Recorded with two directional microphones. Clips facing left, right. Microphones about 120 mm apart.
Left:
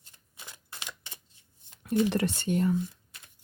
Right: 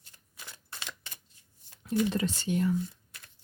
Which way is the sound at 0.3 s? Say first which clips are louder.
Even; 15° left (ahead or behind).